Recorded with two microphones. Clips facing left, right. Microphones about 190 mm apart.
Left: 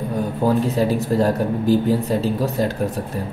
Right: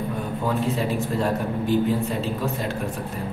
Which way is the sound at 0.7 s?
40° left (ahead or behind).